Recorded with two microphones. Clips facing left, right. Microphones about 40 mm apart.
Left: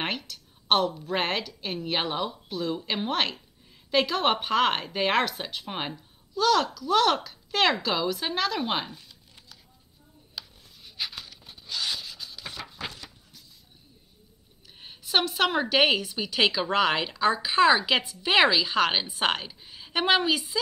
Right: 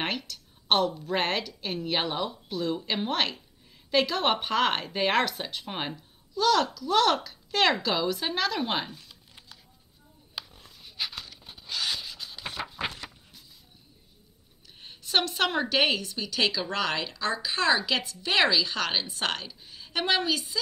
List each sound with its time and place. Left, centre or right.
0.0 s speech: centre
10.4 s a sound: right
10.8 s roaring cats: centre
11.5 s rub: centre
12.3 s a sound: right
14.8 s a woman's voice: centre